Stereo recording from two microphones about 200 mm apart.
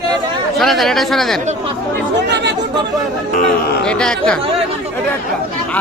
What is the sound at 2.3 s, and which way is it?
Speech, 60° right (ahead or behind).